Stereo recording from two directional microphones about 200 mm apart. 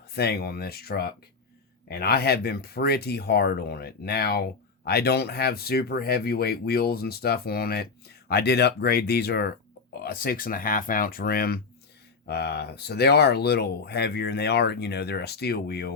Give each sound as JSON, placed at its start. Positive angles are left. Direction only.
{"t": 0.1, "sound": "speech", "side_deg": 50}